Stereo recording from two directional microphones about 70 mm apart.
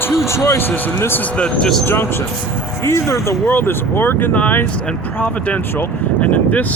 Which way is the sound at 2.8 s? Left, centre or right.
Left.